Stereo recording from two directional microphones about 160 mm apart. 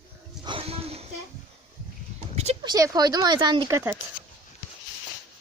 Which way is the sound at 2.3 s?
45° right (ahead or behind).